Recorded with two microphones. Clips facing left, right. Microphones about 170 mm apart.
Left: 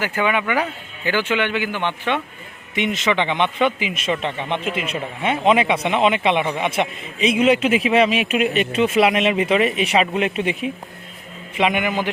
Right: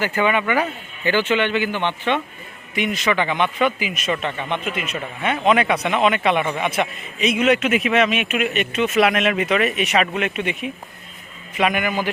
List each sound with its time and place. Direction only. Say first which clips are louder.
0.0 s speech: right 1 dB; 10° left (ahead or behind)
2.7 s speech: left 1 dB; 25° left (ahead or behind)